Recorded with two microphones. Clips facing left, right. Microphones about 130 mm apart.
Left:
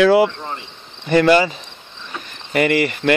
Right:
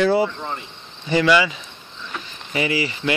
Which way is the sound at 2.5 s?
60° left (ahead or behind).